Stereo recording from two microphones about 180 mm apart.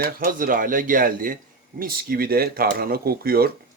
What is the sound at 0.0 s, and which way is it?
Speech, 50° right (ahead or behind).